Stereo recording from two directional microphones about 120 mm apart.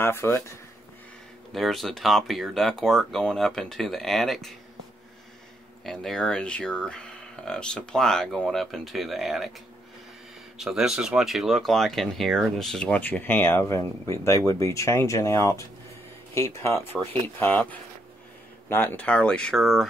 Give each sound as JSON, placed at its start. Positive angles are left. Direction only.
{"t": 0.0, "sound": "speech", "side_deg": 20}
{"t": 1.5, "sound": "speech", "side_deg": 0}
{"t": 5.9, "sound": "speech", "side_deg": 5}
{"t": 10.6, "sound": "speech", "side_deg": -5}